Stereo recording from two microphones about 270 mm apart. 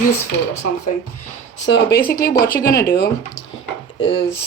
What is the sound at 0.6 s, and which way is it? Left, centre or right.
Speech, left.